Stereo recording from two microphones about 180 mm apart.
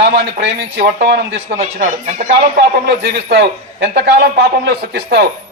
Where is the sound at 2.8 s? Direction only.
60° right (ahead or behind).